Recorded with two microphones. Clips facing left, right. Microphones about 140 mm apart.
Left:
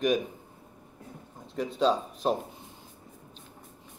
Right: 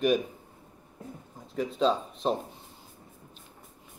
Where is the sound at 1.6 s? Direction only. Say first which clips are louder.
Even; centre (ahead or behind).